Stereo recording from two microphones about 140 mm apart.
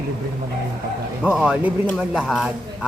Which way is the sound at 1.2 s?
5° right (ahead or behind).